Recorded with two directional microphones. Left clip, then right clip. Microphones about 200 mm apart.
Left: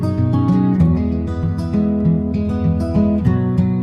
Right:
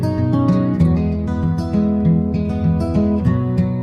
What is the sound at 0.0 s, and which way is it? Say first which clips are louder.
Music: right 1 dB; centre (ahead or behind).